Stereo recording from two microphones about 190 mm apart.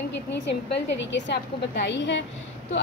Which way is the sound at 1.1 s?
70° left (ahead or behind).